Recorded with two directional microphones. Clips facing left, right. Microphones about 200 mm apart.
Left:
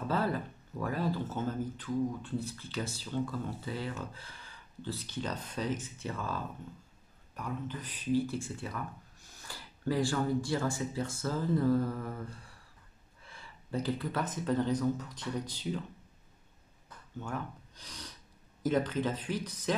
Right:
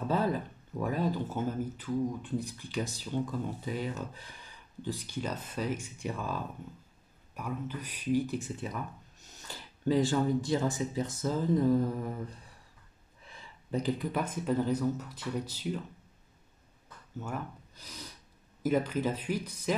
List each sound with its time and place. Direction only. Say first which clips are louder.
0.1 s speech: right 2 dB; 15° right (ahead or behind)
17.2 s speech: right 1 dB; 5° right (ahead or behind)